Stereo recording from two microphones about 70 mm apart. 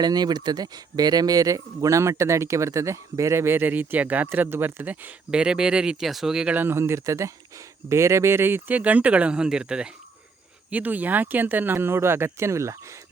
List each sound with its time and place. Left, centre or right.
0.0 s speech: right
5.3 s speech: centre
6.5 s speech: right